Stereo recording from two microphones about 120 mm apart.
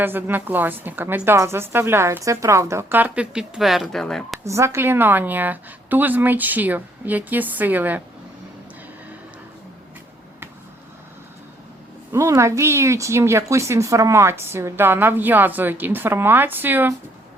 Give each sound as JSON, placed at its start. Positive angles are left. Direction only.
{"t": 0.0, "sound": "a woman's voice", "side_deg": -15}
{"t": 4.4, "sound": "a woman's voice", "side_deg": -25}
{"t": 12.1, "sound": "speech", "side_deg": -25}